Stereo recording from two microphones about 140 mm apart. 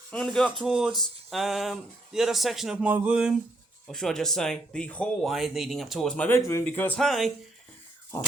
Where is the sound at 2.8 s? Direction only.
10° right (ahead or behind).